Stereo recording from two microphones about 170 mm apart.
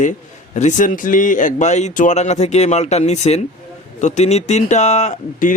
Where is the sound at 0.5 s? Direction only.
45° left (ahead or behind).